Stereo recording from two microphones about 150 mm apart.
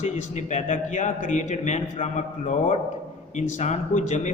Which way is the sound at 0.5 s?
50° left (ahead or behind).